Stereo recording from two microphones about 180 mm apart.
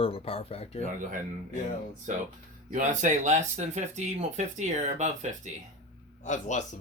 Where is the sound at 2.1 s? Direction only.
45° right (ahead or behind).